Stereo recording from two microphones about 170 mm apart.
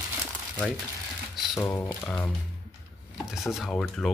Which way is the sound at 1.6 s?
15° left (ahead or behind).